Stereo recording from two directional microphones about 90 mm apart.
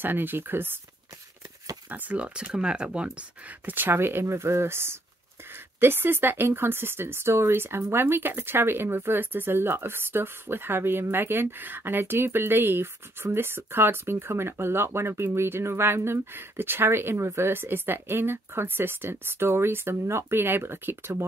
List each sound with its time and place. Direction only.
0.0 s speech: 20° right (ahead or behind)
1.9 s speech: 15° right (ahead or behind)